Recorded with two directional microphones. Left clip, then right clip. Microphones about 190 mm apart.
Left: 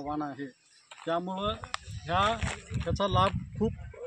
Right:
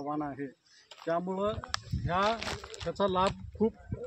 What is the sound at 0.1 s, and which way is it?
A man's voice, 15° right (ahead or behind).